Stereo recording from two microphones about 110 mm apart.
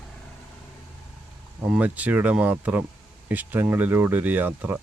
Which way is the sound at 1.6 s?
10° right (ahead or behind).